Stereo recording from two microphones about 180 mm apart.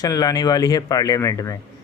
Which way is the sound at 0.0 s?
20° left (ahead or behind).